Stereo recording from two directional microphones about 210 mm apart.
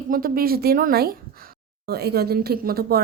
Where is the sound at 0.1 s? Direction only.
45° right (ahead or behind).